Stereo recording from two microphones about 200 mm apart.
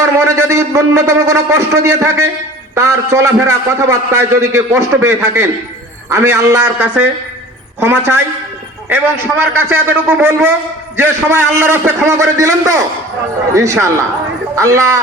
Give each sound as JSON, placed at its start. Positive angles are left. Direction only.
{"t": 0.0, "sound": "a man's voice", "side_deg": -15}